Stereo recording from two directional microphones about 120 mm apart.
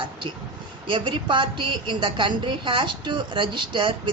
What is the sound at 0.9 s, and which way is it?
A woman's voice, 45° right (ahead or behind).